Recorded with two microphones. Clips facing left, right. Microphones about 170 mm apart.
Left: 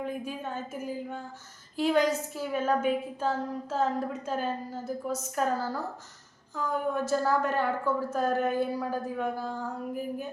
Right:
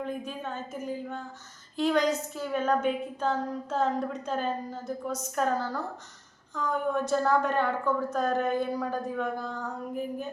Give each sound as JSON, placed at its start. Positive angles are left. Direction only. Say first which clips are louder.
{"t": 0.0, "sound": "a woman's voice", "louder": "even", "side_deg": 10}